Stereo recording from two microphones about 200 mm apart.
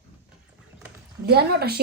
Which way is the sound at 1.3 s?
50° right (ahead or behind).